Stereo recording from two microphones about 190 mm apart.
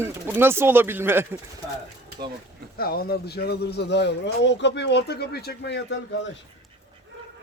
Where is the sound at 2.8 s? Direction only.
55° left (ahead or behind); by 6.3 s 70° left (ahead or behind).